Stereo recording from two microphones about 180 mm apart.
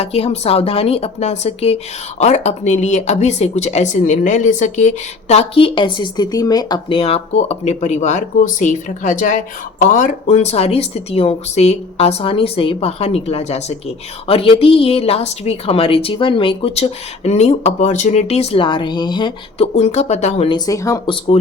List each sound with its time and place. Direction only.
0.0 s a woman's voice: 35° left (ahead or behind)
19.7 s a woman's voice: 40° left (ahead or behind)
20.7 s speech: 15° left (ahead or behind)